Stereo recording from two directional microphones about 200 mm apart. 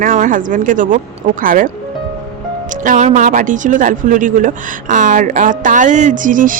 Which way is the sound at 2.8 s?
40° right (ahead or behind).